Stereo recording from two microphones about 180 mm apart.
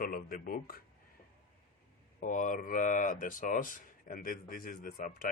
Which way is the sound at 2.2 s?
45° left (ahead or behind).